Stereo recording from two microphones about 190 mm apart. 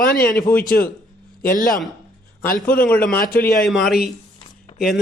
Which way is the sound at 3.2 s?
50° left (ahead or behind).